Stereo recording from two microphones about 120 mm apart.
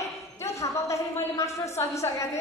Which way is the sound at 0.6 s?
25° left (ahead or behind).